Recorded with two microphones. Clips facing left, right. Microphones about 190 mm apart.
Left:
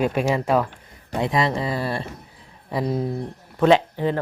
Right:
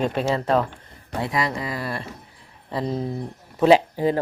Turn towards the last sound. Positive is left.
turn(degrees=-10)  # may be behind; listen again after turning